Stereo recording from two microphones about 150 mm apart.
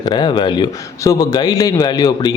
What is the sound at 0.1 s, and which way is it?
A man's voice, 30° left (ahead or behind).